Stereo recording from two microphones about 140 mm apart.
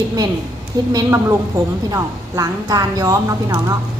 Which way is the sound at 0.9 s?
20° right (ahead or behind).